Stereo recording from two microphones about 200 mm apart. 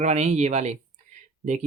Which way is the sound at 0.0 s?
35° right (ahead or behind).